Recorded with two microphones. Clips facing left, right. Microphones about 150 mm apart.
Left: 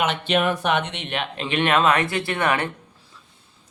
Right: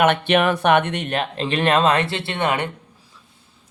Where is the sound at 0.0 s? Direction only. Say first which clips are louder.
Right 5 dB; 60° right (ahead or behind); by 2.6 s 20° right (ahead or behind).